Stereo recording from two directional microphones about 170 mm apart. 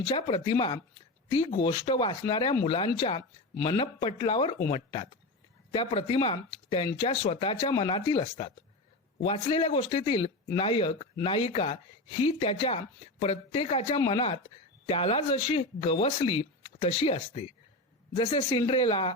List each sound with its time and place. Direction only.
0.0 s a man's voice: 30° left (ahead or behind)